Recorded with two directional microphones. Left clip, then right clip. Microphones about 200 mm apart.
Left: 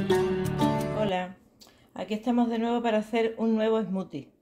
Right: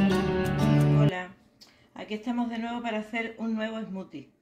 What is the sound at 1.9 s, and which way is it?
Speech, 50° left (ahead or behind).